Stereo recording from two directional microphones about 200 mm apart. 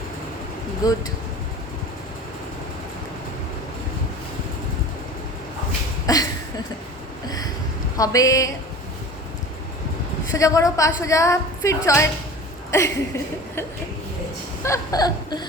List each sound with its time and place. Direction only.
0.8 s a woman's voice: 20° left (ahead or behind)
6.1 s a woman's voice: 20° left (ahead or behind)
7.9 s a woman's voice: 15° left (ahead or behind)
10.3 s a woman's voice: 15° left (ahead or behind)
14.6 s laughter: 15° left (ahead or behind)